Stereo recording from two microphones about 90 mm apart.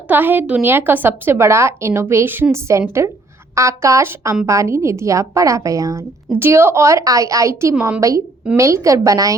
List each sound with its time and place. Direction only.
0.1 s a woman's voice: 20° right (ahead or behind); by 6.0 s 40° right (ahead or behind)
6.3 s a woman's voice: 25° right (ahead or behind)